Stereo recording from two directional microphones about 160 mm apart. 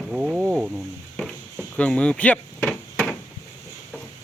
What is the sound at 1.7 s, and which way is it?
Chop, 10° left (ahead or behind).